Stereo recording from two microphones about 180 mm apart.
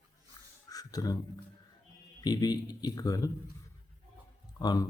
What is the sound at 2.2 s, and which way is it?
Speech, 20° left (ahead or behind).